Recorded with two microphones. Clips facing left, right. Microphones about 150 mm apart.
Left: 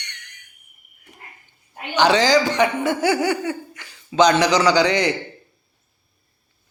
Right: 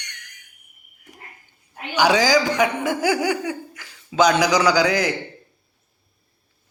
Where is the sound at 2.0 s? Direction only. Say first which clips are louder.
Left 1 dB; 10° right (ahead or behind).